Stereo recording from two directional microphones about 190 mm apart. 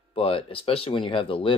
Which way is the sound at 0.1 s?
30° left (ahead or behind).